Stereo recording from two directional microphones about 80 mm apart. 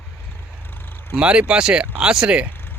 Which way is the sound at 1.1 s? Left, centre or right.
Centre.